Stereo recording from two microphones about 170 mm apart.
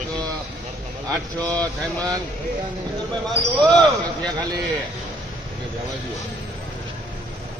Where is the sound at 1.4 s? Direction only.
10° left (ahead or behind).